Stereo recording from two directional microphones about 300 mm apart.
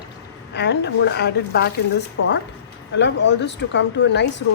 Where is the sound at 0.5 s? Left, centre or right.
Left.